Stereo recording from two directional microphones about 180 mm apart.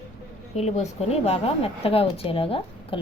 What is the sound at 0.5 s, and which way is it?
Speech, 35° left (ahead or behind).